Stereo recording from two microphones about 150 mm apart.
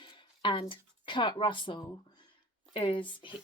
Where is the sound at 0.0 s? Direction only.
35° left (ahead or behind).